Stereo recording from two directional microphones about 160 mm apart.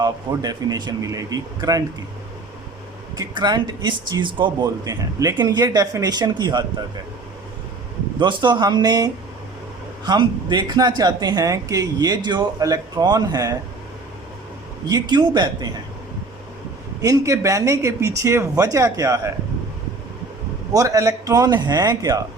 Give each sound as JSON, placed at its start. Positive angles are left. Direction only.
{"t": 0.0, "sound": "speech", "side_deg": -25}
{"t": 3.2, "sound": "speech", "side_deg": -25}
{"t": 8.2, "sound": "speech", "side_deg": -30}
{"t": 10.1, "sound": "speech", "side_deg": -30}
{"t": 14.8, "sound": "speech", "side_deg": -25}
{"t": 17.0, "sound": "speech", "side_deg": -20}
{"t": 20.7, "sound": "speech", "side_deg": -20}